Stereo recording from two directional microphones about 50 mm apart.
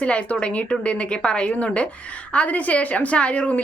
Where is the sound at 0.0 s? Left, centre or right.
Left.